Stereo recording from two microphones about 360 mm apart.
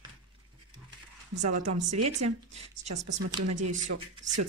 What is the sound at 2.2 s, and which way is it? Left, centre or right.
Speech, right.